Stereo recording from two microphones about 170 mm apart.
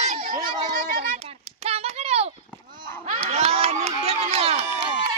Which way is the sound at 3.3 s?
40° right (ahead or behind).